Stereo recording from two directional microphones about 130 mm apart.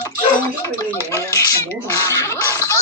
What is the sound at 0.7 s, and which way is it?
Speech, 20° left (ahead or behind).